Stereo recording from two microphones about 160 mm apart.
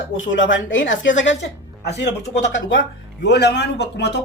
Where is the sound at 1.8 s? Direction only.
90° left.